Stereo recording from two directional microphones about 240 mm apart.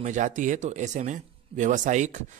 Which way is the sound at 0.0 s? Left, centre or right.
Right.